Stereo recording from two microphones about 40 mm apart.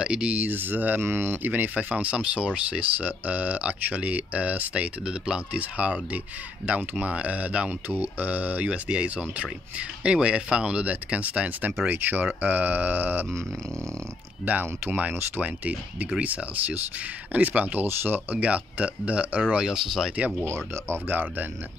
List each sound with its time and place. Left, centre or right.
0.0 s speech: right
0.4 s speech: right
1.0 s speech: right
1.4 s speech: right
2.8 s speech: right
5.0 s speech: centre
5.5 s speech: right
8.6 s speech: right
11.9 s speech: right
14.4 s speech: right
17.8 s speech: right
18.3 s speech: right
19.6 s speech: centre
20.4 s speech: right